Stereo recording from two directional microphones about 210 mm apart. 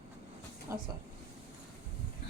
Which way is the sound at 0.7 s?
10° right (ahead or behind).